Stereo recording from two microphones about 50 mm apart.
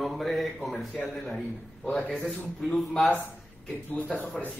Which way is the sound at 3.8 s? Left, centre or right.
Left.